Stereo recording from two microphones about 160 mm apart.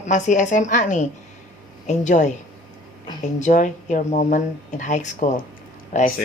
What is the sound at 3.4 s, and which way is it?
Speech, 55° left (ahead or behind).